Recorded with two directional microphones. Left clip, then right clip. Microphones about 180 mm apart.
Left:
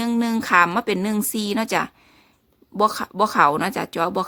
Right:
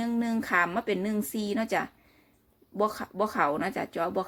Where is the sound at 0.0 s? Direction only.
30° left (ahead or behind).